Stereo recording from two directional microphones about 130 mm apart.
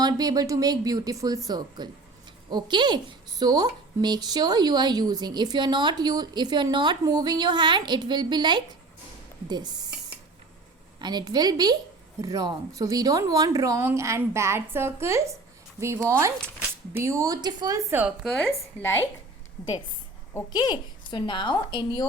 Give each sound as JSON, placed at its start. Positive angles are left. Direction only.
{"t": 0.0, "sound": "a woman's voice", "side_deg": -30}
{"t": 11.0, "sound": "a woman's voice", "side_deg": -35}
{"t": 17.9, "sound": "a woman's voice", "side_deg": -10}
{"t": 18.4, "sound": "a woman's voice", "side_deg": 20}
{"t": 20.5, "sound": "speech", "side_deg": 35}